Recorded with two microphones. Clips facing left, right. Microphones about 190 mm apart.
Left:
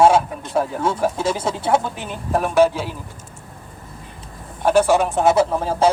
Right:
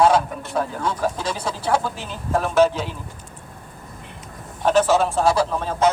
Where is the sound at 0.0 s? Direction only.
25° left (ahead or behind).